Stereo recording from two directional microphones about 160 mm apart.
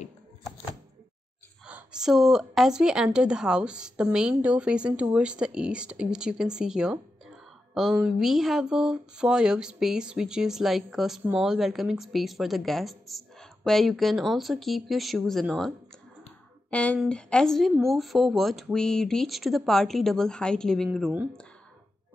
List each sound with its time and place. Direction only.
1.7 s speech: 5° right (ahead or behind)
8.0 s speech: centre (ahead or behind)
16.7 s speech: 10° left (ahead or behind)